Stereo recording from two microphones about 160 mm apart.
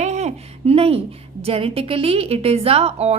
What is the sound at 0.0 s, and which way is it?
A woman's voice, 45° right (ahead or behind).